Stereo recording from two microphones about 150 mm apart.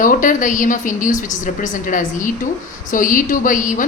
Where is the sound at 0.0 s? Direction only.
60° left (ahead or behind).